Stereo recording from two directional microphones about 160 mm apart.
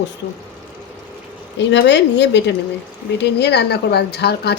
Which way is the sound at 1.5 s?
90° left.